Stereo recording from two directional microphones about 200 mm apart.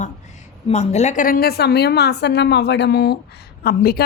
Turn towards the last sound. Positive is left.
turn(degrees=50)  # may be behind; listen again after turning